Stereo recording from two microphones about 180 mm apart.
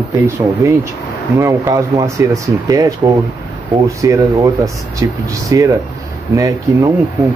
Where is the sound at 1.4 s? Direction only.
15° right (ahead or behind).